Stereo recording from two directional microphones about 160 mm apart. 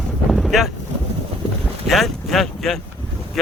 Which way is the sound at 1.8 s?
Centre (ahead or behind).